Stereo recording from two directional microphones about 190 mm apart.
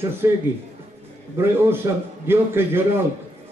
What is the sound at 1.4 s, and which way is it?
A man's voice, 10° right (ahead or behind).